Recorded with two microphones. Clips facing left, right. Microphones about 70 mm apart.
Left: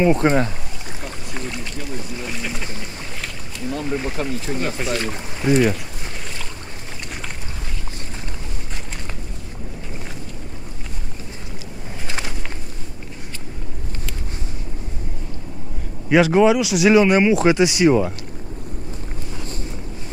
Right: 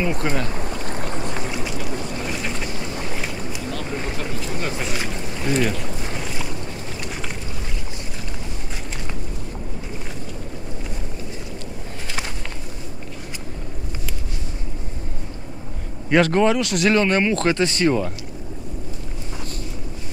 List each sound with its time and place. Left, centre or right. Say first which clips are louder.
0.0 s speech: left 7 dB; left
1.3 s boat: right 2 dB; centre
4.2 s speech: left 3 dB; left
4.6 s speech: left 2 dB; centre
16.1 s speech: left 3 dB; centre